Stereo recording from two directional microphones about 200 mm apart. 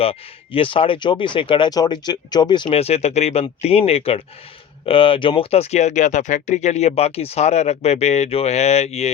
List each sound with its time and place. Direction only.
0.0 s speech: 30° left (ahead or behind)